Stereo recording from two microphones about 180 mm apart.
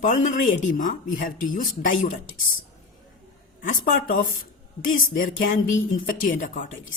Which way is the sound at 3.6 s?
50° left (ahead or behind).